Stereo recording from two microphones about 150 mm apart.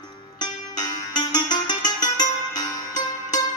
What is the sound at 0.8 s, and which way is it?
Music, 30° left (ahead or behind).